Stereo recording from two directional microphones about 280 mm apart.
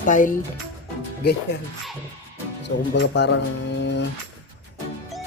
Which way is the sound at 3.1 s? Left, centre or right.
Left.